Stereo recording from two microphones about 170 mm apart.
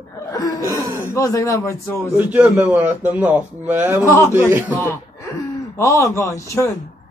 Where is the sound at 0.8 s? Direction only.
20° right (ahead or behind).